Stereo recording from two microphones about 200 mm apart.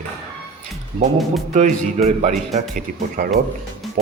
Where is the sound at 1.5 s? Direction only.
35° right (ahead or behind).